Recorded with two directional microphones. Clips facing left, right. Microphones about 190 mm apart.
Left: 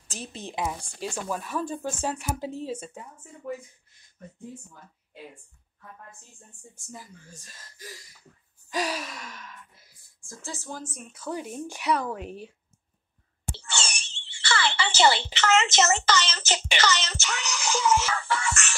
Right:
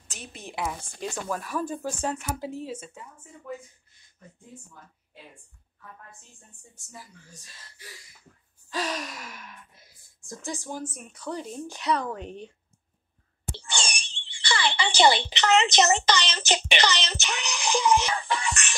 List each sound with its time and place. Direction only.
0.1 s a woman's voice: 30° left (ahead or behind); by 1.4 s 10° left (ahead or behind)
1.4 s speech: 5° right (ahead or behind)
2.0 s speech: 10° left (ahead or behind)
2.4 s speech: 30° left (ahead or behind)
7.3 s speech: 45° left (ahead or behind)
8.6 s speech: 15° left (ahead or behind); by 9.4 s 5° right (ahead or behind)
10.2 s speech: 15° right (ahead or behind); by 12.5 s 5° left (ahead or behind)
13.6 s a sound: 15° right (ahead or behind)
15.2 s a child's voice: 15° right (ahead or behind)